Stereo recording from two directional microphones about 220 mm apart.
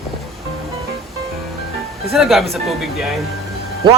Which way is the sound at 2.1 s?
Centre (ahead or behind).